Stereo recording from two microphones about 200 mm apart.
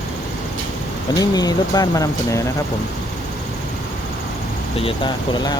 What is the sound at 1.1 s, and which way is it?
Speech, 20° left (ahead or behind).